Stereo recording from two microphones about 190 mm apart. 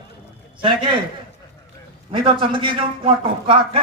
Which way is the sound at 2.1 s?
25° right (ahead or behind).